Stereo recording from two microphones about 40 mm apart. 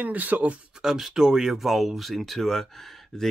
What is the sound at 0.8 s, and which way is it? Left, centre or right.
Speech, centre.